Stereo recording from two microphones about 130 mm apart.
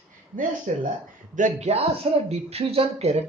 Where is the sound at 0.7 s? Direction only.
70° right (ahead or behind).